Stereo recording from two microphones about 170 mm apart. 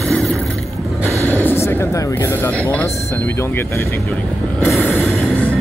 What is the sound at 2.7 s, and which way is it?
Speech, 15° left (ahead or behind).